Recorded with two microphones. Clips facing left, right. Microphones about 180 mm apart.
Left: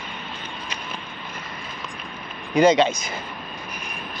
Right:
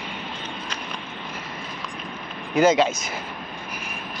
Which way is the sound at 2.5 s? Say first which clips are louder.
Left 1 dB; 5° right (ahead or behind).